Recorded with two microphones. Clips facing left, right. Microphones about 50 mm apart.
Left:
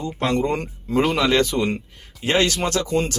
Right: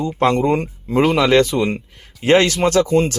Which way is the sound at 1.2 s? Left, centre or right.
Right.